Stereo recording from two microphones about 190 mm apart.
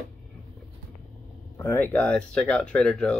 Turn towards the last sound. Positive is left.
turn(degrees=5)  # may be behind; listen again after turning